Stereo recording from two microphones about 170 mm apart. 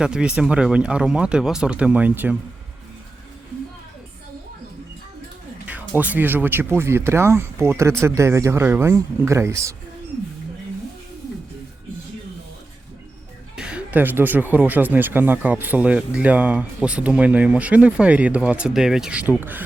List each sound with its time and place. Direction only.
0.0 s speech: 5° right (ahead or behind)
5.6 s speech: 10° right (ahead or behind)
13.6 s speech: 5° right (ahead or behind)